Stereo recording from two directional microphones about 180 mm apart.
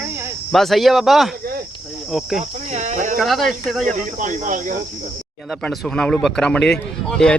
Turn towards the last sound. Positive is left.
turn(degrees=5)  # may be behind; listen again after turning